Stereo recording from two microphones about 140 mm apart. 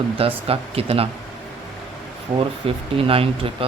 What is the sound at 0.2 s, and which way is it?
Speech, 45° right (ahead or behind).